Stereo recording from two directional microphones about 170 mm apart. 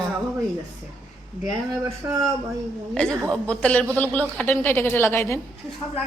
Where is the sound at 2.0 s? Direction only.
15° right (ahead or behind).